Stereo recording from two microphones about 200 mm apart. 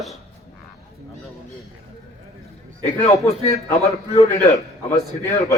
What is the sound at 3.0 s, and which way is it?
Speech, 15° left (ahead or behind).